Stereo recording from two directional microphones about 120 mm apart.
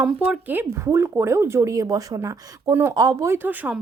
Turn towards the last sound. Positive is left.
turn(degrees=-10)  # may be behind; listen again after turning